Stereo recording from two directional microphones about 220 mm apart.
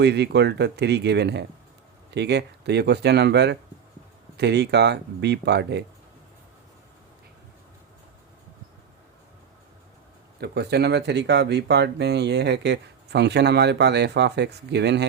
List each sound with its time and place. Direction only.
0.0 s speech: 50° right (ahead or behind)
10.4 s speech: 50° right (ahead or behind)